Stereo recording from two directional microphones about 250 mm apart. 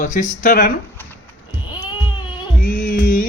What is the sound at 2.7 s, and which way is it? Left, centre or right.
Music, left.